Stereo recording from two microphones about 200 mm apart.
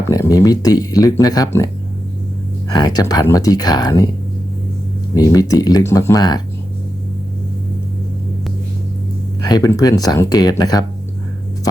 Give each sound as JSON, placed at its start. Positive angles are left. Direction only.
{"t": 0.1, "sound": "speech", "side_deg": 20}
{"t": 5.1, "sound": "speech", "side_deg": 20}
{"t": 9.4, "sound": "speech", "side_deg": 20}